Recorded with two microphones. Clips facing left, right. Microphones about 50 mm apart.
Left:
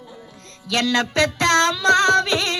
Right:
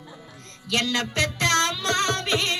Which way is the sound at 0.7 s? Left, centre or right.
Left.